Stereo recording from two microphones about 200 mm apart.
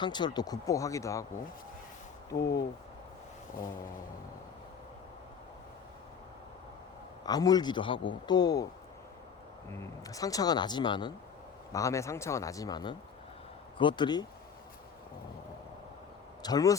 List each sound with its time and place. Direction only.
0.0 s speech: 20° left (ahead or behind)
2.4 s speech: 55° left (ahead or behind)
7.3 s a man's voice: 20° left (ahead or behind)
10.1 s a man's voice: 15° left (ahead or behind)
16.4 s a man's voice: 20° left (ahead or behind)